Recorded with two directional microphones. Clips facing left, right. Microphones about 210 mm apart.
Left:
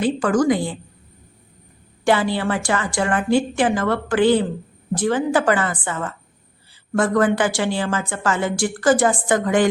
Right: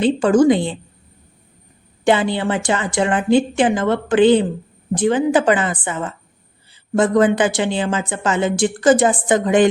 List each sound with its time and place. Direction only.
0.0 s a woman's voice: 25° right (ahead or behind)
2.0 s a woman's voice: 20° right (ahead or behind)